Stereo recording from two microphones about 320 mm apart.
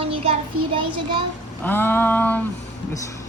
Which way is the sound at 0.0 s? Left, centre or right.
Centre.